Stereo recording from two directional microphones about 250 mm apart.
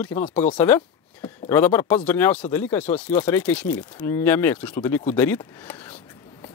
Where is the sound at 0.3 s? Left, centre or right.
Left.